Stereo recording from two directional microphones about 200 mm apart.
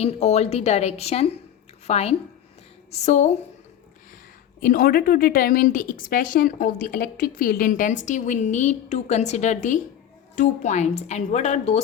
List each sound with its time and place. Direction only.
0.0 s a woman's voice: 30° left (ahead or behind)
4.6 s a woman's voice: 45° left (ahead or behind)